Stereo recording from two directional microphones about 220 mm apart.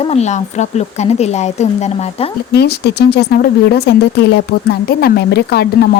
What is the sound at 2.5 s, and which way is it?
Speech, 50° left (ahead or behind).